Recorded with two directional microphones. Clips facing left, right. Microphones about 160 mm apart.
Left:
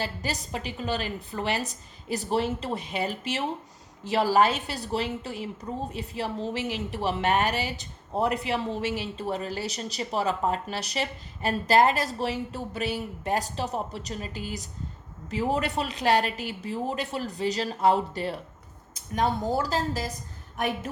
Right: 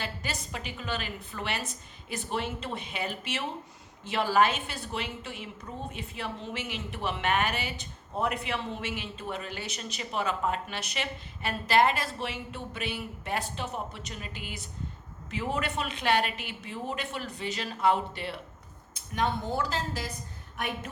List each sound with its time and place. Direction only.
0.0 s a woman's voice: 35° left (ahead or behind)